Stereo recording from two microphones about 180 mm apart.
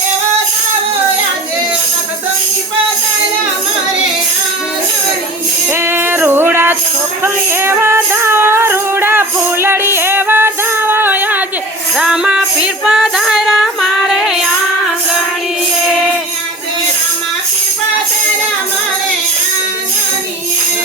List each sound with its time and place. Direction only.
5.7 s music: 15° right (ahead or behind)